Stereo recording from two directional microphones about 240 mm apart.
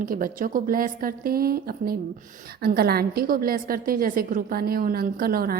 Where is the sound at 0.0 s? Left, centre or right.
Right.